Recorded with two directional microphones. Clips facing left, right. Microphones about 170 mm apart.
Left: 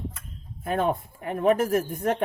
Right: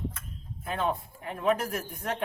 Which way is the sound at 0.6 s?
50° left (ahead or behind).